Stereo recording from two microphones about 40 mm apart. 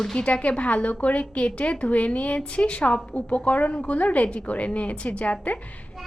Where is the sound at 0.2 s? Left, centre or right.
Left.